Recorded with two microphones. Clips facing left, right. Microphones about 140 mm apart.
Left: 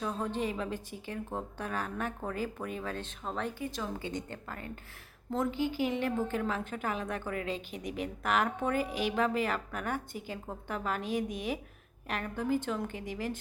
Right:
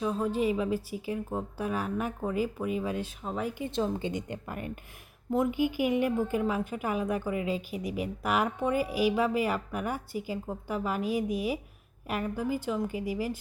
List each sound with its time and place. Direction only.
0.0 s a woman's voice: 5° right (ahead or behind)
3.6 s a woman's voice: 25° right (ahead or behind); by 13.4 s 5° right (ahead or behind)